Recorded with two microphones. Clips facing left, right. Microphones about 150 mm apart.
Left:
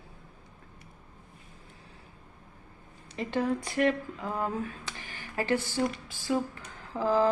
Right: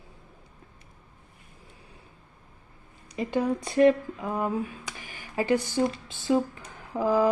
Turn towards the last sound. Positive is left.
turn(degrees=-15)  # may be behind; listen again after turning